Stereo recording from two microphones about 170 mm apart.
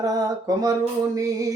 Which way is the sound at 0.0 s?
20° right (ahead or behind).